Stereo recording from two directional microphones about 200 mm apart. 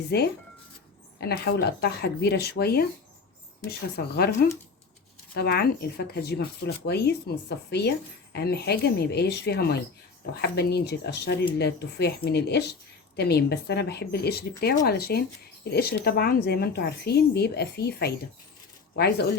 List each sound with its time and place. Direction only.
0.1 s speech: 55° left (ahead or behind)
5.3 s speech: 50° left (ahead or behind)